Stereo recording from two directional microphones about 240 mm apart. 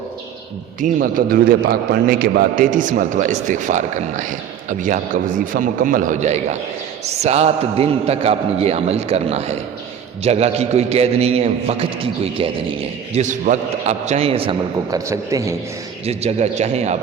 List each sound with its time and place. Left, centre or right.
0.8 s a man's voice: right; by 15.5 s centre
16.0 s a man's voice: right